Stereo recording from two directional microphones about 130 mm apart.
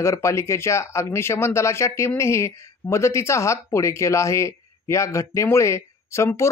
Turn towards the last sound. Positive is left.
turn(degrees=20)  # may be behind; listen again after turning